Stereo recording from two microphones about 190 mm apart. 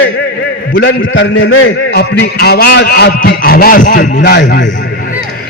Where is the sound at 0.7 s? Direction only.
85° left; by 4.2 s 45° left (ahead or behind).